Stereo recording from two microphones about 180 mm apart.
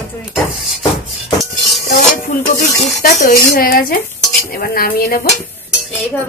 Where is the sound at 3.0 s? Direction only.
55° left (ahead or behind).